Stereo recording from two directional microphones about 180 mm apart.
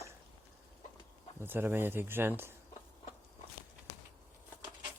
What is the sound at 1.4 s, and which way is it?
Speech, 10° right (ahead or behind).